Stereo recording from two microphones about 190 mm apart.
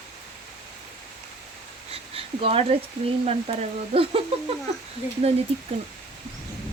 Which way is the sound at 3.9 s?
30° right (ahead or behind).